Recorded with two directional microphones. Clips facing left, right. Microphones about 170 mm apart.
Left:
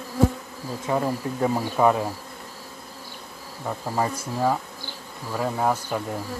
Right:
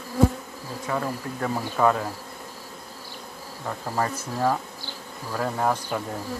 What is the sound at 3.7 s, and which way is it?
Speech, 10° left (ahead or behind).